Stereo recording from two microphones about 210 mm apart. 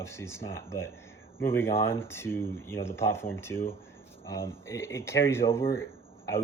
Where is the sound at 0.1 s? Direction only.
10° left (ahead or behind).